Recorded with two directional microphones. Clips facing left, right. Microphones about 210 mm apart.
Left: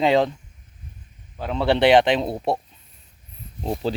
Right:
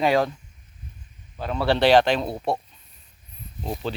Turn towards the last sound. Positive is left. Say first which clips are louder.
# left 4 dB
turn(degrees=30)  # may be behind; listen again after turning